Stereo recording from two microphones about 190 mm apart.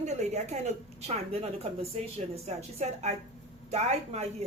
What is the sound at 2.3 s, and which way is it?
Speech, 35° right (ahead or behind).